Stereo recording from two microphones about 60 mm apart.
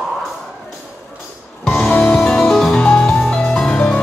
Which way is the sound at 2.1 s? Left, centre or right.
Centre.